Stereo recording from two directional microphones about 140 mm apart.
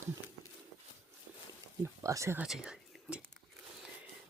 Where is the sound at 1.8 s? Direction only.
20° right (ahead or behind).